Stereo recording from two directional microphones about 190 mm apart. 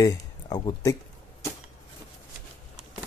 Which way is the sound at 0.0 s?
20° left (ahead or behind).